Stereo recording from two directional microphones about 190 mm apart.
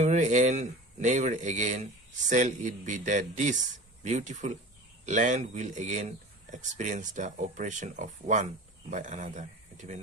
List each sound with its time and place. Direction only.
0.0 s speech: 40° right (ahead or behind)